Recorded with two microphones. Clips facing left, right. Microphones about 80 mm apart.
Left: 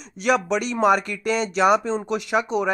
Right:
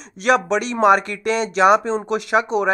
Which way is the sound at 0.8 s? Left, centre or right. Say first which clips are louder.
Right 4 dB; right.